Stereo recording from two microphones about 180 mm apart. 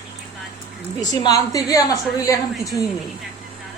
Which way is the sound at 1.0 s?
20° left (ahead or behind).